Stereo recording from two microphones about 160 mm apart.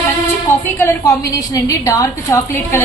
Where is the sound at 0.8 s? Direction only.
20° left (ahead or behind).